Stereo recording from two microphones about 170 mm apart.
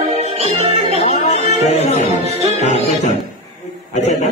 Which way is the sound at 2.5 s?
40° left (ahead or behind).